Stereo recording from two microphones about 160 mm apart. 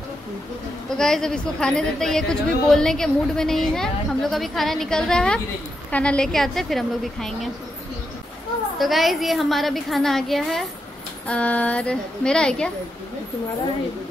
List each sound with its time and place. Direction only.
0.8 s a woman's voice: 5° left (ahead or behind)
8.7 s a woman's voice: centre (ahead or behind)